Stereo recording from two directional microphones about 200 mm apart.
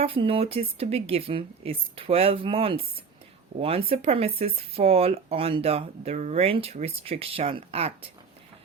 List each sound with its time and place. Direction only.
0.0 s speech: 30° right (ahead or behind)